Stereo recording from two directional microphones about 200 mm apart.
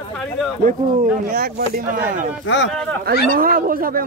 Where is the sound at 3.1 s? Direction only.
45° right (ahead or behind).